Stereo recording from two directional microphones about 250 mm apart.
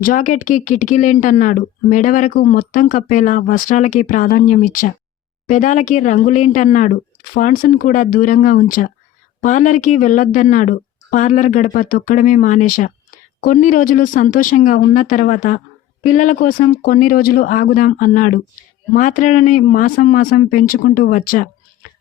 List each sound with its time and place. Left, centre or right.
0.0 s a woman's voice: left